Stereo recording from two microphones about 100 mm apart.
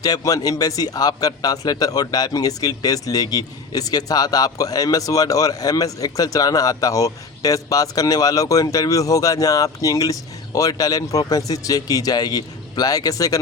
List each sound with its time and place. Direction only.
0.0 s a man's voice: 40° left (ahead or behind)